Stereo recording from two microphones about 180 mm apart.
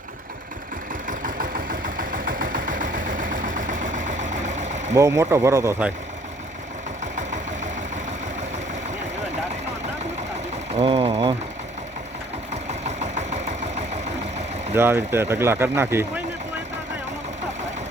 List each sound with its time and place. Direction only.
1.0 s engine: 50° right (ahead or behind)
4.9 s speech: 15° right (ahead or behind)
7.2 s vehicle: 40° right (ahead or behind)
10.8 s sewing machine: 30° right (ahead or behind)
12.8 s engine: 40° right (ahead or behind)
14.7 s speech: 15° right (ahead or behind)